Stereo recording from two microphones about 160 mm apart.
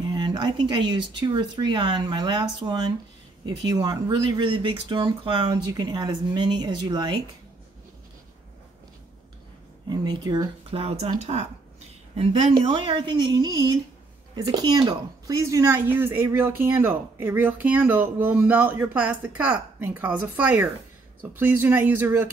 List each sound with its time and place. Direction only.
0.1 s speech: 30° right (ahead or behind)
9.8 s a woman's voice: 30° right (ahead or behind)